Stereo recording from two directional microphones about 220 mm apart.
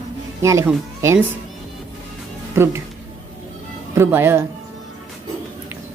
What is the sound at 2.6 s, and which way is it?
Speech, 10° right (ahead or behind).